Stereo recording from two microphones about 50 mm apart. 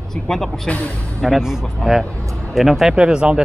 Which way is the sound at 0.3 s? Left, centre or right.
Centre.